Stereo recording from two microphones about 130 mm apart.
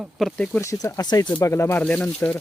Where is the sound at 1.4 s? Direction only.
20° left (ahead or behind).